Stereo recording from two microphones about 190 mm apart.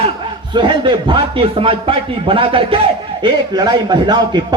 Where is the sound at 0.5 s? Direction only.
25° right (ahead or behind).